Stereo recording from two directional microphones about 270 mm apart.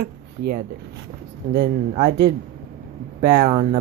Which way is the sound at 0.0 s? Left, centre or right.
Right.